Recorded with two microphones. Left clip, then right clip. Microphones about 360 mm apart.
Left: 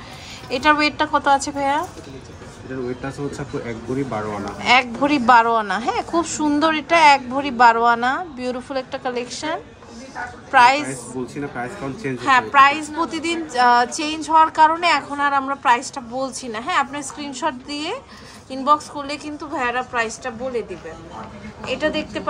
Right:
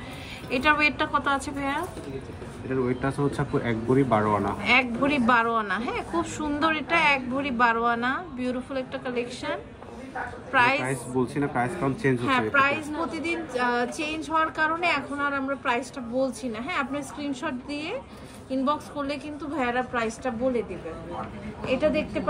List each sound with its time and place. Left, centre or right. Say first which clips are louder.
0.5 s speech: left 5 dB; centre
3.6 s speech: right 4 dB; centre
4.6 s a woman's voice: left 7 dB; centre
11.3 s a man's voice: right 1 dB; centre
12.2 s a woman's voice: left 11 dB; left
21.6 s a woman's voice: left 2 dB; left